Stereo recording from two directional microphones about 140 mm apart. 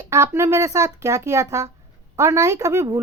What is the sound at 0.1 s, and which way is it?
Speech, 20° right (ahead or behind).